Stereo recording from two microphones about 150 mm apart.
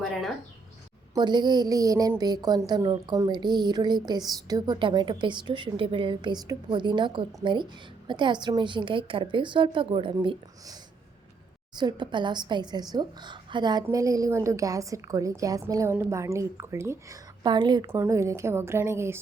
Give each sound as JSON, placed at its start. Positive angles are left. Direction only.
{"t": 0.0, "sound": "speech", "side_deg": 0}
{"t": 1.1, "sound": "a woman's voice", "side_deg": -30}
{"t": 17.4, "sound": "a woman's voice", "side_deg": -30}